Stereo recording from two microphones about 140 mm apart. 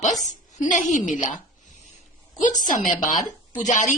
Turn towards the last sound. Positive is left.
turn(degrees=65)  # may be behind; listen again after turning